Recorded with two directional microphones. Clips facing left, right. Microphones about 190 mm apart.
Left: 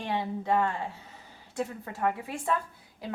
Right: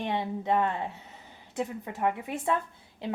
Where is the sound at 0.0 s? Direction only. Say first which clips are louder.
Right 1 dB; 20° right (ahead or behind).